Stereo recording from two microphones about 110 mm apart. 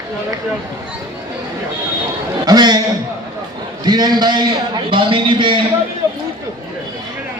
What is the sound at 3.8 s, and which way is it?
A man's voice, 40° right (ahead or behind).